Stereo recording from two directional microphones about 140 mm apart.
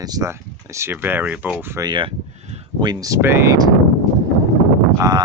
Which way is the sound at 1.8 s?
35° right (ahead or behind).